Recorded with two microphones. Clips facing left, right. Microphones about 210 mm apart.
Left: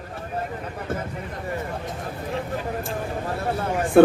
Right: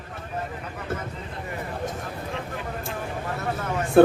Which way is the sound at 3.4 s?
30° left (ahead or behind).